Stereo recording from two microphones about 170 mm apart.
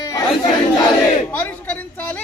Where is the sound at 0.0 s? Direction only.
20° left (ahead or behind).